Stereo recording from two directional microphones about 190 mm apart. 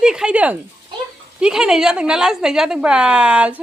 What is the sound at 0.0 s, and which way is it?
A woman's voice, 5° right (ahead or behind).